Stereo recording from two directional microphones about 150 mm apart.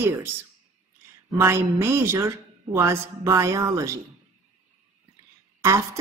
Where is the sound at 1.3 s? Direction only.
20° right (ahead or behind).